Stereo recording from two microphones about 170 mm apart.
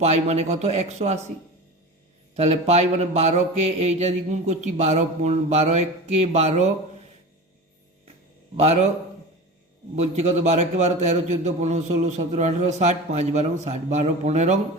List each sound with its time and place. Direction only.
0.0 s mantra: 40° right (ahead or behind)
2.3 s mantra: 40° right (ahead or behind)
8.5 s mantra: 40° right (ahead or behind)
9.9 s a man's voice: 40° right (ahead or behind)